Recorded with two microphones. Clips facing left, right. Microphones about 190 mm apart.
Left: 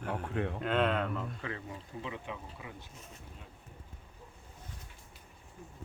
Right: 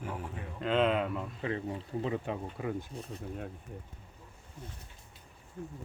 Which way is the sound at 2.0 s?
40° right (ahead or behind).